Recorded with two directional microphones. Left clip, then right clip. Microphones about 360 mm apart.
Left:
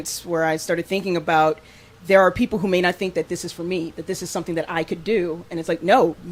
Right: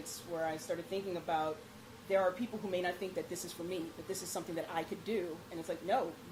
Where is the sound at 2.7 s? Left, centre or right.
Left.